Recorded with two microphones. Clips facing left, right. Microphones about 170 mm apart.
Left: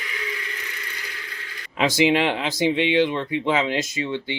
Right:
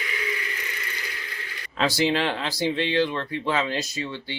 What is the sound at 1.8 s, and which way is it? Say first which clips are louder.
Speech: left 4 dB; 15° left (ahead or behind).